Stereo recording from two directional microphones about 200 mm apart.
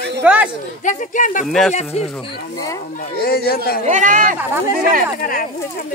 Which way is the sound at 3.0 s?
50° left (ahead or behind).